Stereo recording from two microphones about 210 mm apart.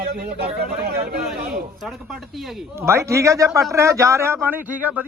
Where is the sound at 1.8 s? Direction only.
Centre (ahead or behind).